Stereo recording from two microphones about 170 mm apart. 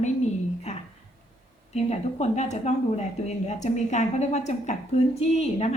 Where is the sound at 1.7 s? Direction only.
40° left (ahead or behind).